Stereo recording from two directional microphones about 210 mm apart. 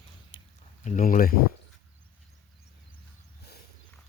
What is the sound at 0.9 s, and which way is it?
Speech, 40° left (ahead or behind).